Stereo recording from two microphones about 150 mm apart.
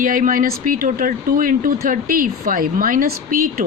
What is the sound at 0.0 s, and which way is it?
Speech, 65° right (ahead or behind).